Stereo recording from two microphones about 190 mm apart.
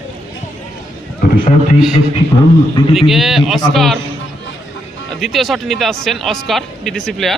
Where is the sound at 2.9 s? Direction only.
Centre (ahead or behind).